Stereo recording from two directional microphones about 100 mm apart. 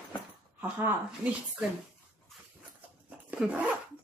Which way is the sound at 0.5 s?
20° right (ahead or behind).